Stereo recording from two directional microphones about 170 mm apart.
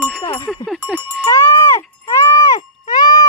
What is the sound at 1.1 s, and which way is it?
Sheep, 15° left (ahead or behind).